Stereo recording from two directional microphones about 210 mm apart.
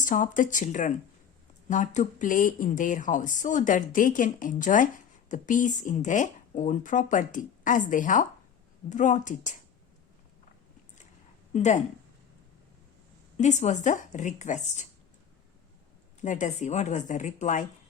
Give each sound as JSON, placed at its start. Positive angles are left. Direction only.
{"t": 0.0, "sound": "speech", "side_deg": 40}
{"t": 11.5, "sound": "speech", "side_deg": 35}
{"t": 13.3, "sound": "speech", "side_deg": 35}
{"t": 16.2, "sound": "speech", "side_deg": 35}